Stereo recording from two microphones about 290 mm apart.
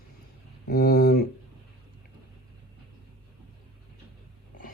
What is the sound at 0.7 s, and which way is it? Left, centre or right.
Speech, left.